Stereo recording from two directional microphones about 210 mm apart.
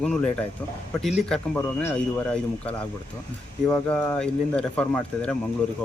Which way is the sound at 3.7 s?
5° left (ahead or behind).